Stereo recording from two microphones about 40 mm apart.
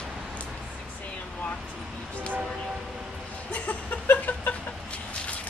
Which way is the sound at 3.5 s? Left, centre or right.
Left.